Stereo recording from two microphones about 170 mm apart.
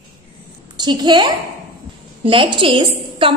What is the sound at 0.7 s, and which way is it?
A woman's voice, 25° right (ahead or behind).